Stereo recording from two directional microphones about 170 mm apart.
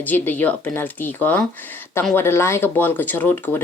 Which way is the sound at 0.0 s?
10° left (ahead or behind).